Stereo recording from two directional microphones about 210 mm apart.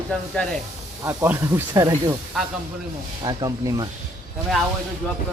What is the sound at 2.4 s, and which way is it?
Speech, centre (ahead or behind).